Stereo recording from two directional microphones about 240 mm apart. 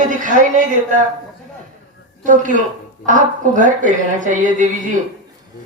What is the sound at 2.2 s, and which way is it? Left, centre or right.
Speech, right.